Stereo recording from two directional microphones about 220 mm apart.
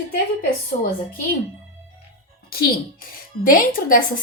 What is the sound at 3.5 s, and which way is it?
Speech, 40° left (ahead or behind).